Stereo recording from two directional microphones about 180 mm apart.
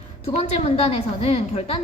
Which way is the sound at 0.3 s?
35° left (ahead or behind).